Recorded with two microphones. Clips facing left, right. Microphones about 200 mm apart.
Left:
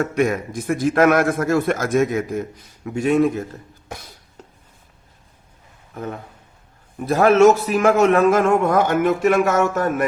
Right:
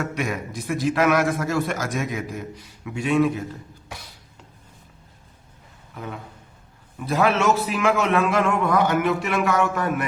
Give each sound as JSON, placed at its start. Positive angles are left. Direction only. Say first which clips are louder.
{"t": 0.0, "sound": "a man's voice", "louder": "left 7 dB", "side_deg": 50}
{"t": 5.9, "sound": "a man's voice", "louder": "left 5 dB", "side_deg": 45}